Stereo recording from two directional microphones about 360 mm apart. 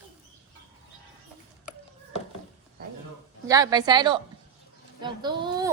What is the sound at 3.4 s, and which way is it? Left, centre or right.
A woman's voice, centre.